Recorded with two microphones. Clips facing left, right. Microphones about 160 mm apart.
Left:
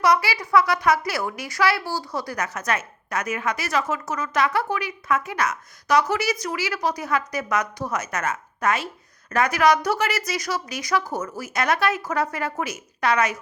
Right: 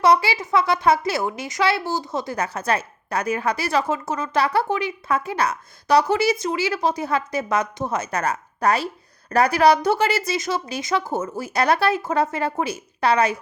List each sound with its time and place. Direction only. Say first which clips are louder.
0.0 s a woman's voice: right 3 dB; 25° right (ahead or behind)